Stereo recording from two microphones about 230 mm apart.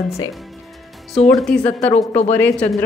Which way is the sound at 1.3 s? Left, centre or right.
Centre.